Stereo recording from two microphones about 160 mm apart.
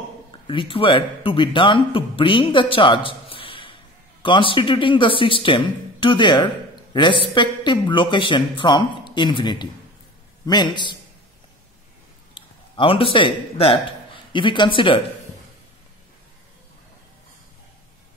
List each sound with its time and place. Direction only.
0.5 s a man's voice: 35° left (ahead or behind)
12.4 s a man's voice: 35° left (ahead or behind)